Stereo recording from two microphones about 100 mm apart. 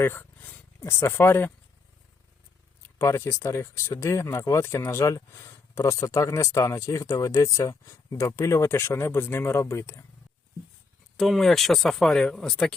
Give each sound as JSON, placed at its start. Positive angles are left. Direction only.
{"t": 0.0, "sound": "speech", "side_deg": 20}
{"t": 3.0, "sound": "speech", "side_deg": 30}
{"t": 11.2, "sound": "speech", "side_deg": 0}